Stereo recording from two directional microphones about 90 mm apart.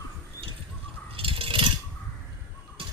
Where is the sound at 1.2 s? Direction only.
80° right.